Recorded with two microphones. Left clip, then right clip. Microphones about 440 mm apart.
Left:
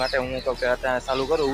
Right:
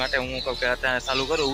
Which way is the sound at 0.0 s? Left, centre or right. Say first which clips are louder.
Left 1 dB; right.